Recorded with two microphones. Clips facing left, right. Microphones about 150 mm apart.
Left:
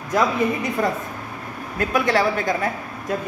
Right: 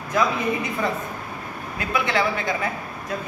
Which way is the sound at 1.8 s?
45° left (ahead or behind).